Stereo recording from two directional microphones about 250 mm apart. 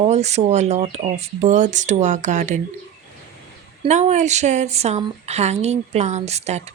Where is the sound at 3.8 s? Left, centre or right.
Right.